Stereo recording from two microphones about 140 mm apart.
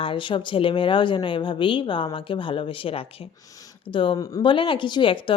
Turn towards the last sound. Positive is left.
turn(degrees=35)  # may be behind; listen again after turning